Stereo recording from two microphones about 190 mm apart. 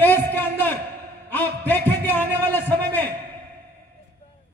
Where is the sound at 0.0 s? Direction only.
10° left (ahead or behind).